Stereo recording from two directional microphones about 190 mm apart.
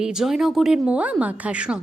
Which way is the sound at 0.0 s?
5° right (ahead or behind).